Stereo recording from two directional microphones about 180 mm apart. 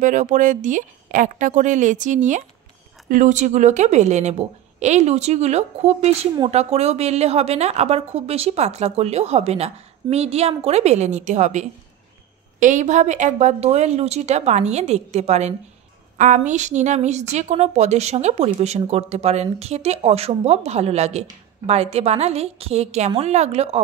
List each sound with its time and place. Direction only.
0.0 s a woman's voice: 45° right (ahead or behind)